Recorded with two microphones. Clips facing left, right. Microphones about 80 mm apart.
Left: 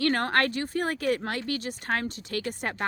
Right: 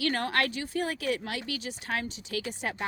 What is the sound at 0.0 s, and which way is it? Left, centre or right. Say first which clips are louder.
Speech: left 4 dB; left.